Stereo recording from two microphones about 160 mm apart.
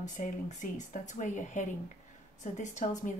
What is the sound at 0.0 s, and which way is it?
Speech, 50° left (ahead or behind).